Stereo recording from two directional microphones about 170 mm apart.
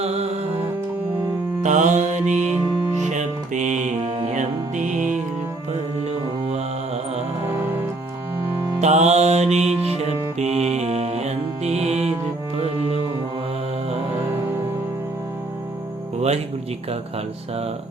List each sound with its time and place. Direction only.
0.0 s music: 40° right (ahead or behind)
1.6 s music: 45° right (ahead or behind)
2.6 s music: 30° left (ahead or behind)
2.9 s music: 45° right (ahead or behind)
8.8 s music: 40° right (ahead or behind)